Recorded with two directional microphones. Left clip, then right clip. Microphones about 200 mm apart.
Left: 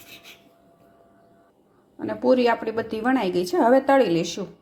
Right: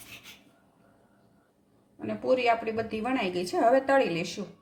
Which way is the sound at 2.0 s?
35° left (ahead or behind).